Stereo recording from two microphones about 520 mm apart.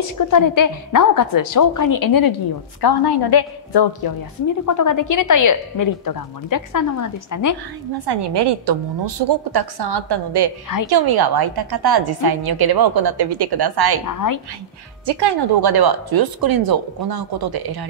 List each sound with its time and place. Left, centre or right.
0.2 s a woman's voice: left
8.0 s a woman's voice: right
15.0 s a woman's voice: right